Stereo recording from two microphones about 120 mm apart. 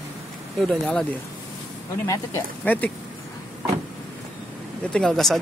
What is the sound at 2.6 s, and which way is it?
Speech, 15° left (ahead or behind).